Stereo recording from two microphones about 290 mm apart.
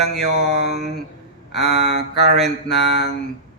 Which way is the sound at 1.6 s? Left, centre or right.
Left.